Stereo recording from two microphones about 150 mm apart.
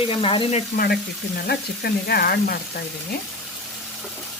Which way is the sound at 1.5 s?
90° left.